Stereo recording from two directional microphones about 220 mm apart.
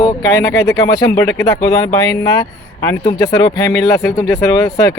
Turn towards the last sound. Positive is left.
turn(degrees=15)  # may be behind; listen again after turning